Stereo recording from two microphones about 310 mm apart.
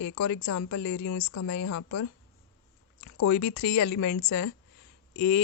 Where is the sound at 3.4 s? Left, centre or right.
Left.